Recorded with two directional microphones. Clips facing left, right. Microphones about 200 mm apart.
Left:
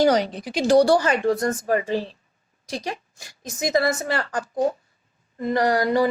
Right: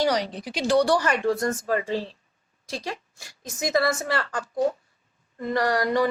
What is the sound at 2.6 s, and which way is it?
Speech, 20° left (ahead or behind).